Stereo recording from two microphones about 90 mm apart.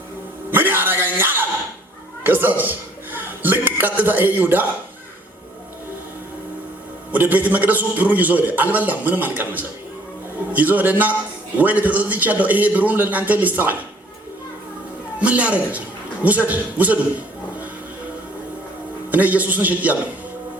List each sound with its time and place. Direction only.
0.5 s a sound: 20° right (ahead or behind)
2.2 s a man's voice: 20° right (ahead or behind)
7.1 s a man's voice: 20° right (ahead or behind)
15.2 s a man's voice: 15° right (ahead or behind)
19.1 s a man's voice: 15° right (ahead or behind)